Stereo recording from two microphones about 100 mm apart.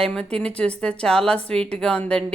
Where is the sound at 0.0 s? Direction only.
10° left (ahead or behind).